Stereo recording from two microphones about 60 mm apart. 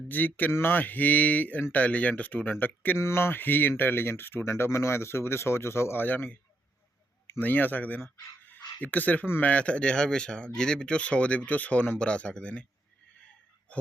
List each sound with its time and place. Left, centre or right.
0.1 s speech: left
3.0 s speech: left
7.3 s speech: left
8.4 s a sound: left
9.4 s speech: left